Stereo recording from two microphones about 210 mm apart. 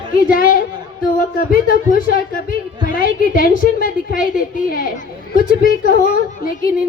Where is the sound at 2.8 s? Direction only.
40° left (ahead or behind).